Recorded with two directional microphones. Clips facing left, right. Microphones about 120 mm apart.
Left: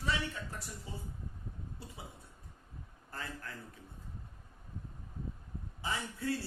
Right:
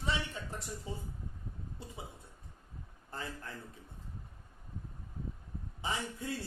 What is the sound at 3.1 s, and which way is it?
Speech, 25° right (ahead or behind).